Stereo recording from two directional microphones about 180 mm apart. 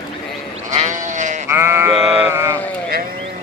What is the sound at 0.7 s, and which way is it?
Sheep, 40° right (ahead or behind).